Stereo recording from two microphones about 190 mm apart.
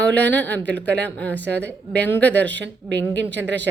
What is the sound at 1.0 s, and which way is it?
Speech, 5° left (ahead or behind).